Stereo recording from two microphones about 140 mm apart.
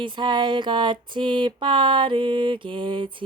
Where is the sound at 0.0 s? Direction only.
35° right (ahead or behind).